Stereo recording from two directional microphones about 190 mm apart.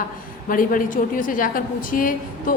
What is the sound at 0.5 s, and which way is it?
A woman's voice, 45° left (ahead or behind).